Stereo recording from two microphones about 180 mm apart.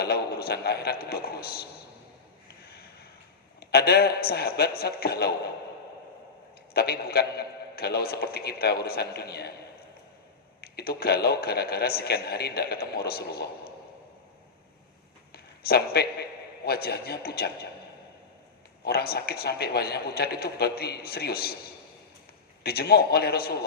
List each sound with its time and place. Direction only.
0.0 s a man's voice: 60° left (ahead or behind)
3.6 s a man's voice: 60° left (ahead or behind)
6.7 s a man's voice: 60° left (ahead or behind)
10.6 s a man's voice: 60° left (ahead or behind)
15.3 s a sound: 60° left (ahead or behind)
16.6 s a man's voice: 60° left (ahead or behind)
18.9 s a man's voice: 60° left (ahead or behind)
22.6 s a man's voice: 60° left (ahead or behind)